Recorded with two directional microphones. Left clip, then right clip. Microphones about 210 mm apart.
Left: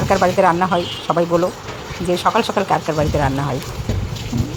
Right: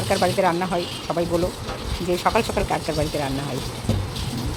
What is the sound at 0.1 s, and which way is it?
Speech, 10° left (ahead or behind).